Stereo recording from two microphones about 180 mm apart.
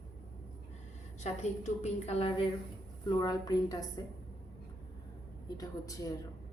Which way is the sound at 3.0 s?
20° left (ahead or behind).